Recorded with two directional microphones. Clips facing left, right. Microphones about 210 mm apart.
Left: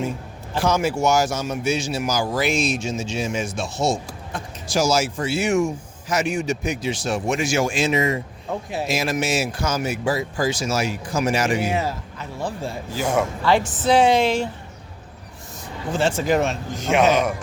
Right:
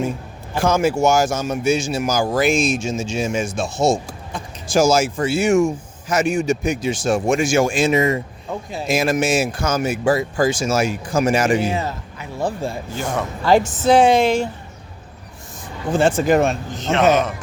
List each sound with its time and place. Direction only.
0.5 s a man's voice: 50° right (ahead or behind)
11.7 s a man's voice: 10° left (ahead or behind)
12.4 s a man's voice: 45° right (ahead or behind)
12.9 s a man's voice: 10° left (ahead or behind)
13.4 s a man's voice: 40° right (ahead or behind)
15.9 s a man's voice: 50° right (ahead or behind)
16.7 s a man's voice: 10° left (ahead or behind)